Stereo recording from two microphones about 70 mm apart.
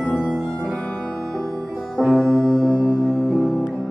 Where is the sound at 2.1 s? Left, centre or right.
Centre.